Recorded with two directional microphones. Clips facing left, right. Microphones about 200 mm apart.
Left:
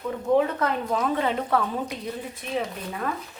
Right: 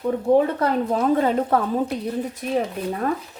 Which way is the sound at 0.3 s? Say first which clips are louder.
Right 1 dB; 35° right (ahead or behind).